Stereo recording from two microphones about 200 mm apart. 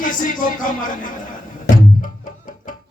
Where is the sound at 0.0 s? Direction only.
40° left (ahead or behind).